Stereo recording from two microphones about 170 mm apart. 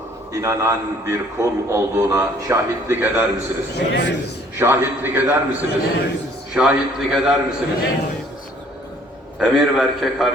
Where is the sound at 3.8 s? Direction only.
90° left.